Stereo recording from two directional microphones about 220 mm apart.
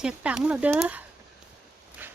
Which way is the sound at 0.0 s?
5° right (ahead or behind).